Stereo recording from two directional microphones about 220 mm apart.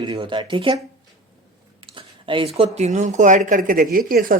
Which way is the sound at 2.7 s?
30° right (ahead or behind).